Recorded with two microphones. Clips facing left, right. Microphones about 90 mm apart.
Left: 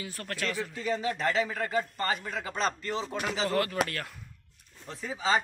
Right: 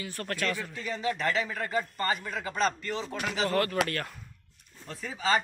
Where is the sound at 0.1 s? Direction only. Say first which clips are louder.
Right 4 dB; 5° left (ahead or behind).